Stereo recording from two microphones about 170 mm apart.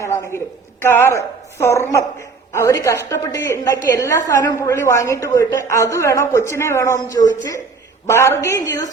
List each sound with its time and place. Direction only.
0.0 s a woman's voice: 15° left (ahead or behind)